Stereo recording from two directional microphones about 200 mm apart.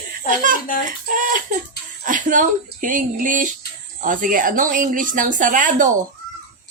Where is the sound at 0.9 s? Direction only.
40° right (ahead or behind).